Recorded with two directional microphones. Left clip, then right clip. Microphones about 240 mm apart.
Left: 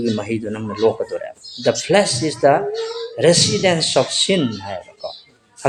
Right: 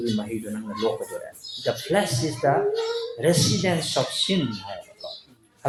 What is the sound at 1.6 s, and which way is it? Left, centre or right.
Speech, left.